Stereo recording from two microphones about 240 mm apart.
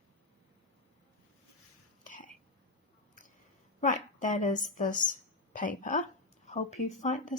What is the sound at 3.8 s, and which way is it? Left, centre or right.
A woman's voice, left.